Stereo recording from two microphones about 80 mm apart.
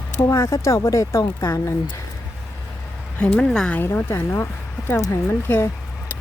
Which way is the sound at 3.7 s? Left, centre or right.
Left.